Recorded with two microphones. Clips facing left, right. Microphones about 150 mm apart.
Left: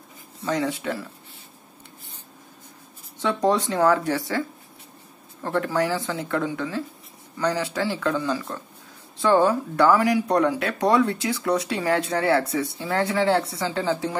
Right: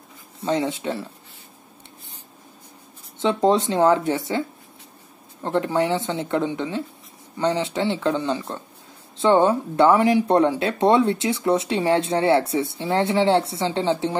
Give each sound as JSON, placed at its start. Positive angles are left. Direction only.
{"t": 0.4, "sound": "speech", "side_deg": -25}
{"t": 3.2, "sound": "speech", "side_deg": -25}